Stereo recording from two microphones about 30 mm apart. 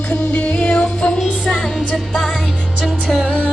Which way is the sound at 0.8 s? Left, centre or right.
Left.